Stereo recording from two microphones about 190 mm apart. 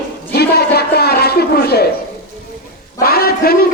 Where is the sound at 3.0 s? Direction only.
55° left (ahead or behind).